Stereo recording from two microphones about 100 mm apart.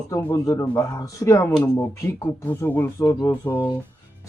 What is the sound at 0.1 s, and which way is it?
Speech, 30° left (ahead or behind).